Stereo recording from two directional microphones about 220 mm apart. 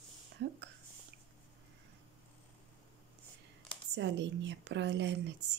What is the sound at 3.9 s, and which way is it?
Speech, 55° right (ahead or behind).